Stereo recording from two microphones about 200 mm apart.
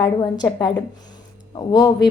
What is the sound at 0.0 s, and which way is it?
A woman's voice, 20° left (ahead or behind).